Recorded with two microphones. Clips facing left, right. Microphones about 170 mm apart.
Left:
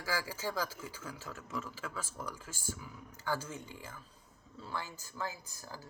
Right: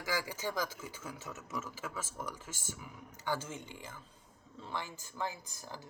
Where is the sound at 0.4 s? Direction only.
25° right (ahead or behind).